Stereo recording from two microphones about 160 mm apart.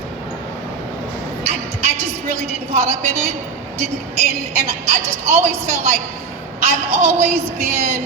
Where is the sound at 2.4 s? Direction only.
45° right (ahead or behind).